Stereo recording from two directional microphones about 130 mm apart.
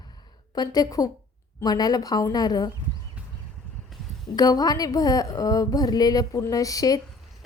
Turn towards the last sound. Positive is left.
turn(degrees=25)  # may be behind; listen again after turning